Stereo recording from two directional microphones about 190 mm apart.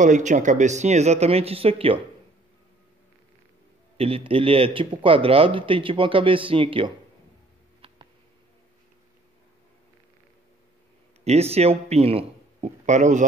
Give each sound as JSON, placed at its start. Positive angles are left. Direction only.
{"t": 0.0, "sound": "speech", "side_deg": -40}
{"t": 4.0, "sound": "a man's voice", "side_deg": -30}
{"t": 11.2, "sound": "speech", "side_deg": -35}